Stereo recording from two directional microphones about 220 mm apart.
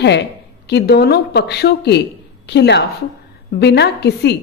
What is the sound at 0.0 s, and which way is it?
A woman's voice, 50° left (ahead or behind).